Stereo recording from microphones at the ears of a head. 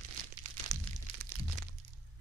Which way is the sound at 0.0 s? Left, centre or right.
Right.